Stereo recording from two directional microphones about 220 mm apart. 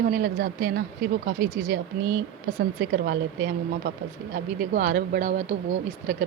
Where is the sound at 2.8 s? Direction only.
45° right (ahead or behind).